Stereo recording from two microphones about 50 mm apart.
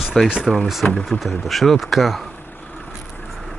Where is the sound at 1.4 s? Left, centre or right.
Centre.